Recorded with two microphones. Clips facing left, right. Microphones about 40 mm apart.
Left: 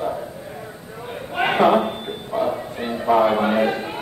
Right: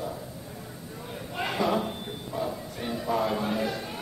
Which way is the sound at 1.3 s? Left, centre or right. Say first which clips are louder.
Left 11 dB; left.